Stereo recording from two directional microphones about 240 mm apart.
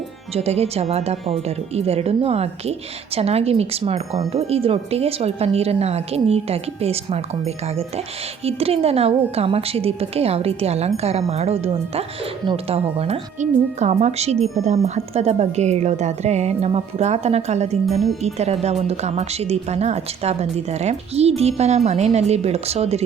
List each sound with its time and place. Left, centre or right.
0.3 s speech: right